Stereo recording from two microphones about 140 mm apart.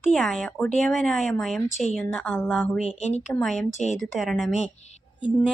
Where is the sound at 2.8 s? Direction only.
50° left (ahead or behind).